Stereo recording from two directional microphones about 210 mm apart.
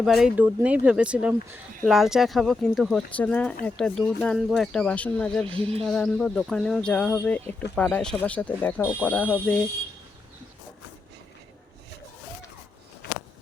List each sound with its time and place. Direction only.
0.0 s speech: centre (ahead or behind)
5.5 s speech: 25° right (ahead or behind)
5.8 s speech: centre (ahead or behind)